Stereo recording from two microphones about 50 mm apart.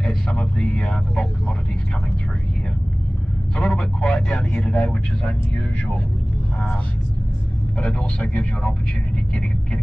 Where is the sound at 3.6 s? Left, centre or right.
Centre.